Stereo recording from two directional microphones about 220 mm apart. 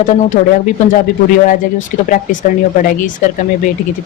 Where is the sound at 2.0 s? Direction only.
35° left (ahead or behind).